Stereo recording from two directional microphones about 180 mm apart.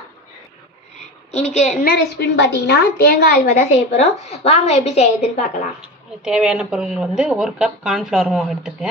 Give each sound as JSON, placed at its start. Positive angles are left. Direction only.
{"t": 1.3, "sound": "a woman's voice", "side_deg": 35}
{"t": 1.9, "sound": "a woman's voice", "side_deg": 65}
{"t": 3.5, "sound": "a woman's voice", "side_deg": 35}
{"t": 5.8, "sound": "speech", "side_deg": -5}